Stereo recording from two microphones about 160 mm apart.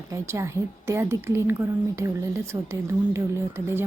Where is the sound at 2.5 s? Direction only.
20° right (ahead or behind).